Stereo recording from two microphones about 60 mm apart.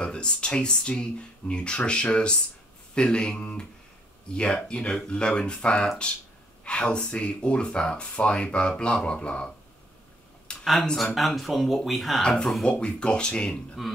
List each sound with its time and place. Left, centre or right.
0.0 s speech: centre
10.6 s speech: centre
12.2 s speech: centre
13.8 s speech: centre